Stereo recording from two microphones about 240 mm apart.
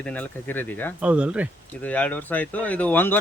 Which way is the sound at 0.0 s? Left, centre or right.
Centre.